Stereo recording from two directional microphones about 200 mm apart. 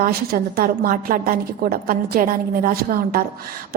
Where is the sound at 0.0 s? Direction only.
50° right (ahead or behind).